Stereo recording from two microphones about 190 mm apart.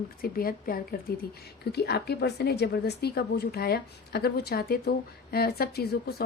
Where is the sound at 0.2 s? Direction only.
50° left (ahead or behind).